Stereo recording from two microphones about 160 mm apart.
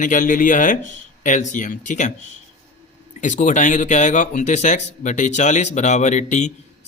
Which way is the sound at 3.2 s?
50° left (ahead or behind).